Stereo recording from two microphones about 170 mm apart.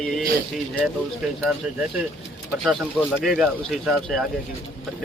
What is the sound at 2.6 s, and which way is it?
Speech, 5° right (ahead or behind).